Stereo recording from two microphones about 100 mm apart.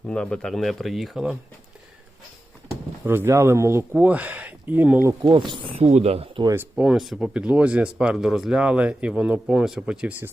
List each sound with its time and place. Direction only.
0.1 s speech: 10° left (ahead or behind)
3.0 s speech: 20° right (ahead or behind)
3.9 s speech: 15° right (ahead or behind)
5.2 s speech: 55° right (ahead or behind)
5.8 s speech: 90° right
6.6 s speech: 10° right (ahead or behind)